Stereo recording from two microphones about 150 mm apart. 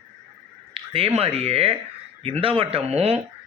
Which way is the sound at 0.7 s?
40° right (ahead or behind).